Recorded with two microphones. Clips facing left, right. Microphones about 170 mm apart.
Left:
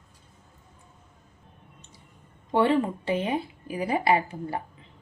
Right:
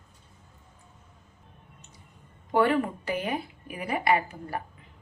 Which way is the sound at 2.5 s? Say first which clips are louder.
Left 1 dB; 25° left (ahead or behind).